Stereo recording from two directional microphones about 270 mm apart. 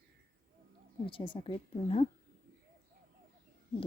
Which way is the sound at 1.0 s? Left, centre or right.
Centre.